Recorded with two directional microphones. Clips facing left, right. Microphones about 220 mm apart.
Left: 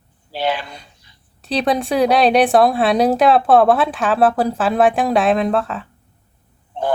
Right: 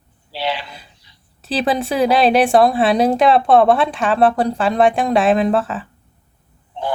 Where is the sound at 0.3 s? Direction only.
50° left (ahead or behind).